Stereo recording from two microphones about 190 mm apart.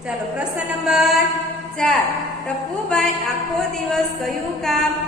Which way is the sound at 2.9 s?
5° left (ahead or behind).